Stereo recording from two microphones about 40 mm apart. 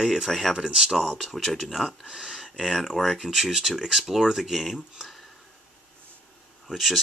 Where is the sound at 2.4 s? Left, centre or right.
Centre.